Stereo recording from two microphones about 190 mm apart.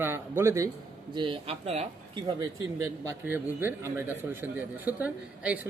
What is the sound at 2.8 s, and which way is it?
A man's voice, 15° right (ahead or behind).